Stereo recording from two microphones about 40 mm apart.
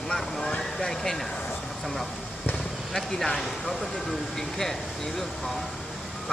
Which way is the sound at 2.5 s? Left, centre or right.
Centre.